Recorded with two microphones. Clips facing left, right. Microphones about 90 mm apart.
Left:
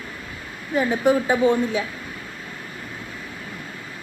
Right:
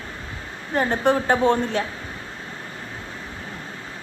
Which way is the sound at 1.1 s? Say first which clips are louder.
Even; 60° right (ahead or behind).